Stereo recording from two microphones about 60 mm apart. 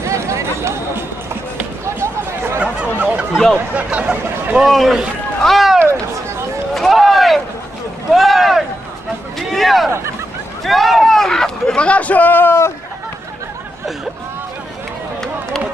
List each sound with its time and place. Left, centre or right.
0.0 s run: right
2.0 s a sound: right
3.7 s speech: right
4.6 s speech: centre
5.8 s speech: right
6.7 s a sound: centre
8.1 s vehicle: centre
9.5 s speech: centre; by 12.5 s left